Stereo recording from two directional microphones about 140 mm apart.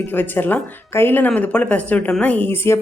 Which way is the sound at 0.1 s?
15° left (ahead or behind).